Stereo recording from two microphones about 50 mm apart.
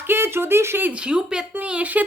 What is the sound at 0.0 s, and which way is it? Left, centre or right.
Speech, right.